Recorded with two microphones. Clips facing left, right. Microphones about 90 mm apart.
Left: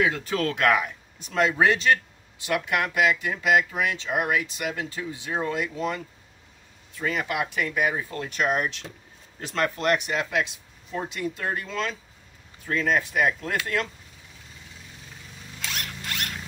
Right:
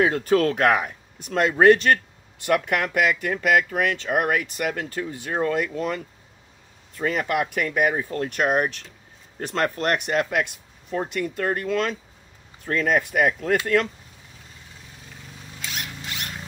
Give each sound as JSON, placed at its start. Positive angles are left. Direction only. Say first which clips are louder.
{"t": 0.0, "sound": "speech", "louder": "right 5 dB", "side_deg": -45}